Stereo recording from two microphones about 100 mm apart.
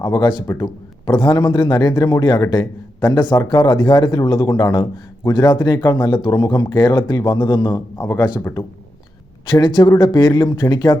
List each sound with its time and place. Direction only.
0.0 s a man's voice: 40° left (ahead or behind); by 8.6 s 25° left (ahead or behind)
9.5 s a man's voice: 40° left (ahead or behind)